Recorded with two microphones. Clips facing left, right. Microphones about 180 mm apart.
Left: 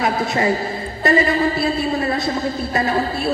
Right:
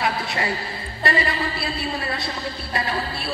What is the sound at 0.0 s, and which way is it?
A woman's voice, 45° left (ahead or behind).